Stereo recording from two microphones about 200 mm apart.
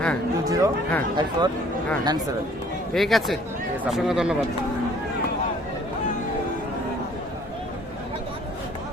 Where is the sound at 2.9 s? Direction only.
Centre (ahead or behind).